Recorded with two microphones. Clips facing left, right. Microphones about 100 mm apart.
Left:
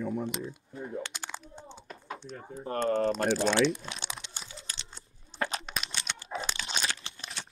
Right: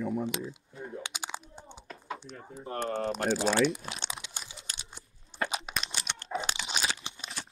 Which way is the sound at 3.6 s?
10° right (ahead or behind).